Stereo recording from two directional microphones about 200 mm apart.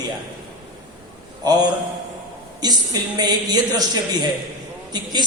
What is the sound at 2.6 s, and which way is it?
A man's voice, 20° right (ahead or behind).